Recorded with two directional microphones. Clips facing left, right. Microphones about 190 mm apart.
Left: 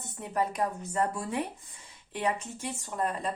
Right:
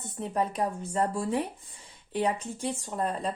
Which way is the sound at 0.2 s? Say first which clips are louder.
Right 1 dB; 30° right (ahead or behind).